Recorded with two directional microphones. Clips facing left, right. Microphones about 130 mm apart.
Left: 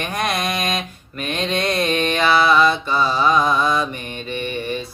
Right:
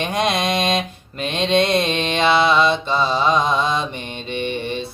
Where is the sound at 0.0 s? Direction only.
25° right (ahead or behind).